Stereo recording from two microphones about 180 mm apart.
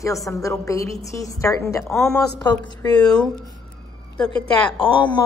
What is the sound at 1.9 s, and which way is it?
Speech, 5° left (ahead or behind).